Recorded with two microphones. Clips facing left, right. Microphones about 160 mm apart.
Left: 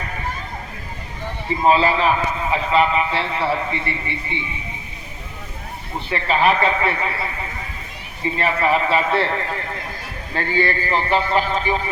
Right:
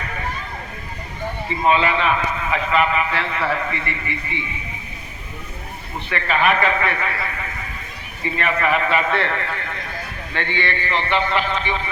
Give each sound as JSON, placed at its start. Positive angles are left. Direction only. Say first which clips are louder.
{"t": 1.5, "sound": "a man's voice", "louder": "left 2 dB", "side_deg": 35}
{"t": 6.1, "sound": "a man's voice", "louder": "left 1 dB", "side_deg": 30}